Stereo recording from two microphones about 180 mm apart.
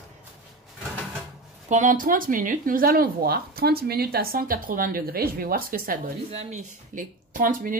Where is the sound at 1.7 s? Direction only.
45° right (ahead or behind).